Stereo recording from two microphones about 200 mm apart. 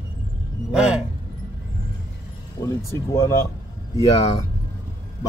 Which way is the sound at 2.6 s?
15° left (ahead or behind).